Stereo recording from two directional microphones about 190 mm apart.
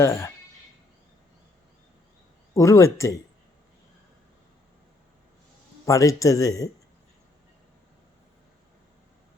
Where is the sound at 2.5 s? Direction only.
15° left (ahead or behind).